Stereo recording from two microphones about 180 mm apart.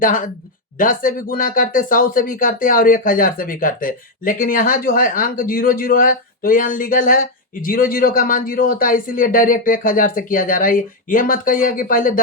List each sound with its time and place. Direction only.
0.0 s speech: 50° left (ahead or behind)